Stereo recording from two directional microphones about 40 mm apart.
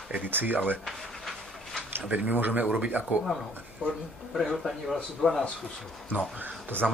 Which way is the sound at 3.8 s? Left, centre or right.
Right.